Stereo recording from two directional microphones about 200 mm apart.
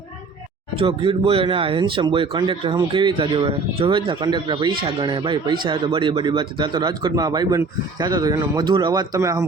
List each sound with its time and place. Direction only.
0.8 s speech: 25° right (ahead or behind)